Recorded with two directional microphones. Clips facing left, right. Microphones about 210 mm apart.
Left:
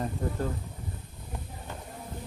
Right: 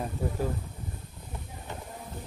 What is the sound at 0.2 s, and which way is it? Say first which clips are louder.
Speech: right 2 dB; 10° right (ahead or behind).